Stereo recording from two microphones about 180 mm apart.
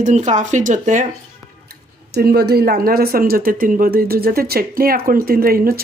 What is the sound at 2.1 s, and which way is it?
A woman's voice, 60° right (ahead or behind).